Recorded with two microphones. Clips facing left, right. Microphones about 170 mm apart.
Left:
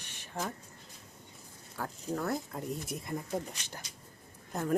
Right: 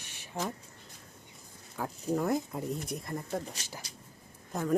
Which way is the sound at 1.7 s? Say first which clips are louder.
Right 4 dB; 10° right (ahead or behind).